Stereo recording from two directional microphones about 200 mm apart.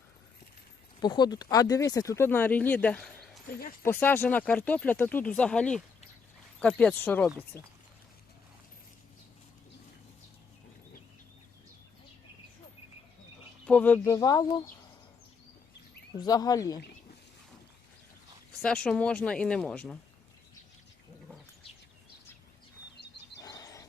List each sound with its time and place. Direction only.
0.9 s speech: 20° left (ahead or behind)
13.7 s speech: 5° left (ahead or behind)
16.1 s speech: 20° left (ahead or behind)
18.6 s speech: 5° left (ahead or behind)
23.4 s a sound: 15° left (ahead or behind)